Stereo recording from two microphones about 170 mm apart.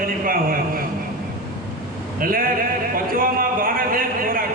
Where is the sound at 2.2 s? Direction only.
55° right (ahead or behind).